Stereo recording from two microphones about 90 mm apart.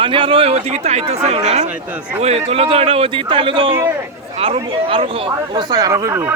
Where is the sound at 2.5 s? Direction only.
90° right; by 3.7 s 75° right (ahead or behind).